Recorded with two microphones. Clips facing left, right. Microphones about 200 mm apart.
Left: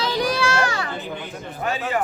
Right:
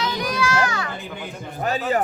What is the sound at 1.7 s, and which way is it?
Speech, 40° right (ahead or behind).